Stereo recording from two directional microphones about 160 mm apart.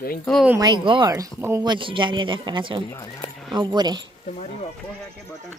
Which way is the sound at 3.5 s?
30° right (ahead or behind).